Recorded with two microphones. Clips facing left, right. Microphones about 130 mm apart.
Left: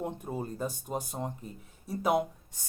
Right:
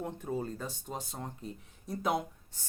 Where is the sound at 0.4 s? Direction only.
10° left (ahead or behind).